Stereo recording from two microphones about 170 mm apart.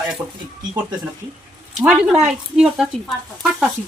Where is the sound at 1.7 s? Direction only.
5° right (ahead or behind).